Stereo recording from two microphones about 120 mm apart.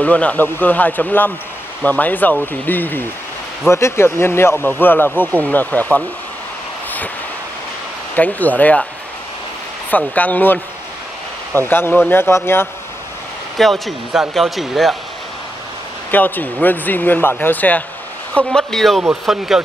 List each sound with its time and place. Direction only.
0.0 s speech: 10° left (ahead or behind)
8.2 s speech: 15° left (ahead or behind)
9.8 s speech: 15° left (ahead or behind)
13.6 s speech: centre (ahead or behind)
16.1 s speech: 15° left (ahead or behind); by 19.6 s 5° right (ahead or behind)